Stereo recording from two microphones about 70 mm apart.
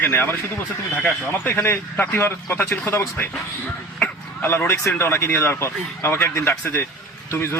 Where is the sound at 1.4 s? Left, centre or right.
Left.